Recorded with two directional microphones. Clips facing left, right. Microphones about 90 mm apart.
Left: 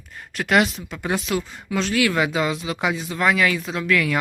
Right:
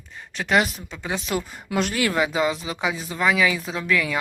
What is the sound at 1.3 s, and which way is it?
Speech, 25° right (ahead or behind).